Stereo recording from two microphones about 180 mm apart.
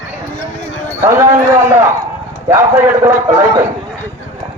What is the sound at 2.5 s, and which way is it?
A man's voice, 15° right (ahead or behind).